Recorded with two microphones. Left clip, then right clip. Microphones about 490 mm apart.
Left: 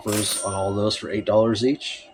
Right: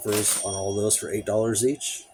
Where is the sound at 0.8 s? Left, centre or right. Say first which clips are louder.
Left 2 dB; right.